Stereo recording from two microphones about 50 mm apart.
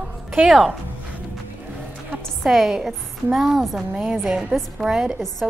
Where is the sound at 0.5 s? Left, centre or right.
Centre.